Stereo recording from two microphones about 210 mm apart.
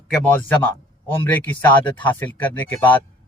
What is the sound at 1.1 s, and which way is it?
A man's voice, 10° left (ahead or behind).